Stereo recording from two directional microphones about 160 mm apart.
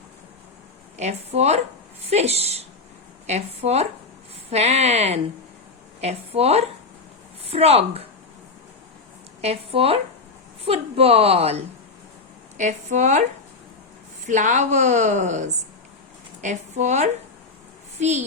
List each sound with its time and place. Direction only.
0.9 s a woman's voice: 45° right (ahead or behind)
9.4 s a woman's voice: 40° right (ahead or behind)
14.3 s a woman's voice: 50° right (ahead or behind)